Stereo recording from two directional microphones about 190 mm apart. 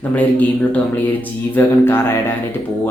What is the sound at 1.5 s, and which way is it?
Speech, 10° left (ahead or behind).